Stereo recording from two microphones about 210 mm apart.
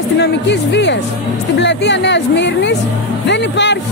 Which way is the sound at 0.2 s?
55° left (ahead or behind).